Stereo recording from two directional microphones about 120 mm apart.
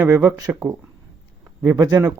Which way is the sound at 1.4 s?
20° right (ahead or behind).